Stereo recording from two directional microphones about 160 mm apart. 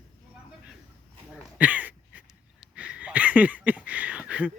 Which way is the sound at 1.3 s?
10° right (ahead or behind).